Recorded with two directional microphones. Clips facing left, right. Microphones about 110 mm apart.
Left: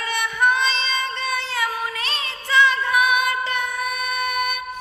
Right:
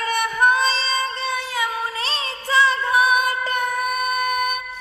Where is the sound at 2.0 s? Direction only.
30° right (ahead or behind).